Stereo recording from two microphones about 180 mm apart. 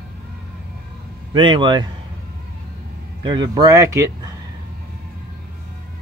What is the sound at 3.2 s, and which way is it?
Speech, 25° right (ahead or behind).